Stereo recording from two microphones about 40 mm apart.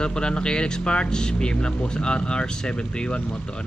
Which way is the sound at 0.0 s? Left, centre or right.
Left.